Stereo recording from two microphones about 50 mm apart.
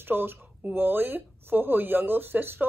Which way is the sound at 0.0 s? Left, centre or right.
Right.